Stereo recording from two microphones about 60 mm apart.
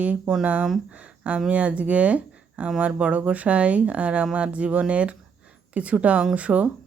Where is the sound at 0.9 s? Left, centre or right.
Right.